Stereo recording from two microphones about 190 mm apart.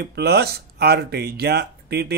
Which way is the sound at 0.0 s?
60° right (ahead or behind).